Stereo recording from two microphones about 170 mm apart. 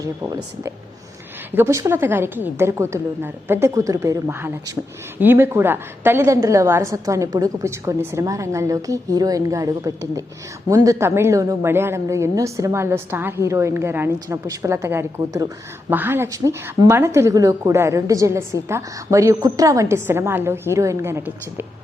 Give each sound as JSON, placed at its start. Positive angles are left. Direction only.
{"t": 0.0, "sound": "speech", "side_deg": -20}
{"t": 1.5, "sound": "a woman's voice", "side_deg": -15}